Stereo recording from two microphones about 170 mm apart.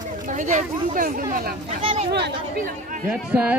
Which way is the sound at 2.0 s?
75° right (ahead or behind).